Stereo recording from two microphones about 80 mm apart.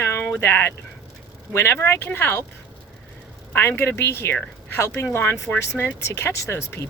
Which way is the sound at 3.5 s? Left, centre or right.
Left.